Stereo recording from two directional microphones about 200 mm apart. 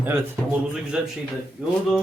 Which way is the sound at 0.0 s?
5° right (ahead or behind).